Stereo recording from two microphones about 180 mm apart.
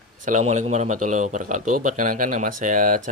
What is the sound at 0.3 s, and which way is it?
Speech, 40° right (ahead or behind).